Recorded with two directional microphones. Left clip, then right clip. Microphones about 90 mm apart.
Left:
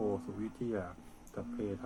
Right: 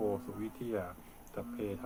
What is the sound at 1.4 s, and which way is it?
Speech, 15° left (ahead or behind).